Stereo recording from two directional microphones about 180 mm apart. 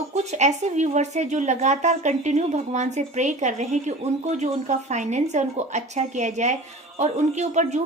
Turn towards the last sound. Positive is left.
turn(degrees=-40)  # may be behind; listen again after turning